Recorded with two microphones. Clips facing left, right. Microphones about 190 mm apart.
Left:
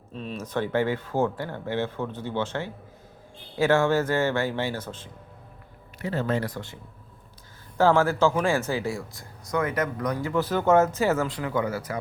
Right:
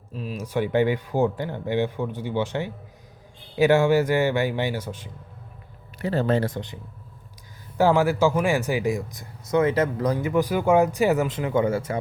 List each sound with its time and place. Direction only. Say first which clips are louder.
0.1 s speech: right 2 dB; 5° right (ahead or behind)
6.0 s speech: right 4 dB; 35° right (ahead or behind)
7.8 s speech: right 1 dB; 15° right (ahead or behind)